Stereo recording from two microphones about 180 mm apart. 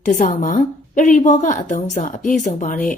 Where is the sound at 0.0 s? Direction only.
45° left (ahead or behind).